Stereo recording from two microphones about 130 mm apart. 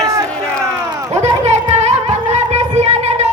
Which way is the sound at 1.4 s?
60° right (ahead or behind).